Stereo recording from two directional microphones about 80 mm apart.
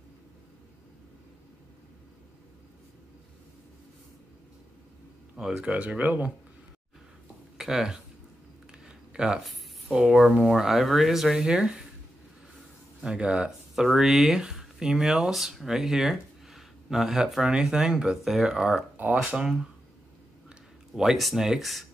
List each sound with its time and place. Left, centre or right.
5.6 s speech: centre
7.5 s speech: centre
8.7 s a sound: centre
10.4 s speech: centre
13.0 s speech: centre
13.8 s speech: centre